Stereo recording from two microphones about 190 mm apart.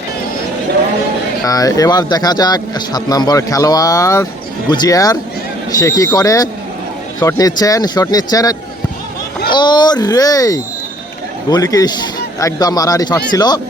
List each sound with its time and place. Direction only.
1.5 s speech: 20° left (ahead or behind)